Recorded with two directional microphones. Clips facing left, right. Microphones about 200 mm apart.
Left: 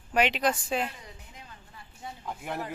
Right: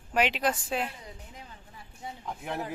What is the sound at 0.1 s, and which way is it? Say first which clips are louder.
Speech: left 1 dB; centre (ahead or behind).